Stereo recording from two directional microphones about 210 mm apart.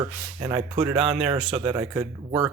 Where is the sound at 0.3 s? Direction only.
20° right (ahead or behind).